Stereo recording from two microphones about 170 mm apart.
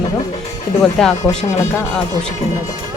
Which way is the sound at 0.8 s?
5° left (ahead or behind).